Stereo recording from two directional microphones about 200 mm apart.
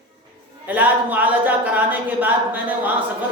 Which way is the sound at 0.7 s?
10° right (ahead or behind).